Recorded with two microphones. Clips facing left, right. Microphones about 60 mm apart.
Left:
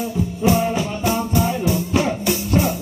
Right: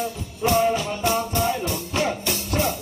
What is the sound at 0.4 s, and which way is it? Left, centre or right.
Music, centre.